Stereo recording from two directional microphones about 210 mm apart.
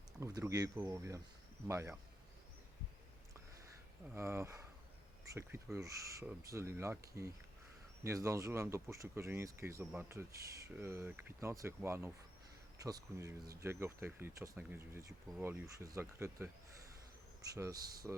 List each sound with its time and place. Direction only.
0.2 s speech: 15° right (ahead or behind)
4.1 s speech: 10° right (ahead or behind)
8.0 s speech: 15° right (ahead or behind)
18.0 s speech: 5° right (ahead or behind)